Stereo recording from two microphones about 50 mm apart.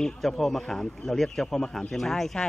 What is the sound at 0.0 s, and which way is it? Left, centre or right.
Speech, centre.